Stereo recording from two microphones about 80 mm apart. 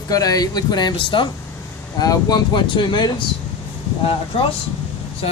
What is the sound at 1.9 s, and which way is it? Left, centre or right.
Speech, left.